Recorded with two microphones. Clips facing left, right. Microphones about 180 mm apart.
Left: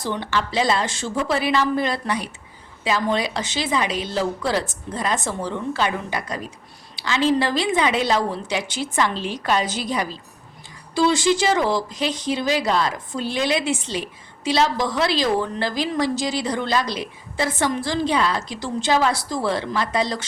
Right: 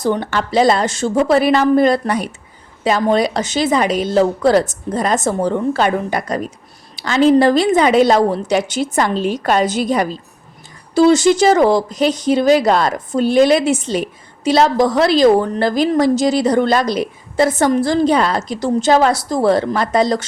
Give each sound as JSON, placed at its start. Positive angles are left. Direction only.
{"t": 0.0, "sound": "speech", "side_deg": -50}